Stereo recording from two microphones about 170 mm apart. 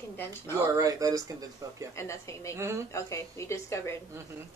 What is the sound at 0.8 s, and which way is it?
Speech, 20° right (ahead or behind).